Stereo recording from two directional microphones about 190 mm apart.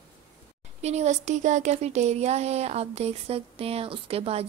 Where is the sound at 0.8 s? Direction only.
35° right (ahead or behind).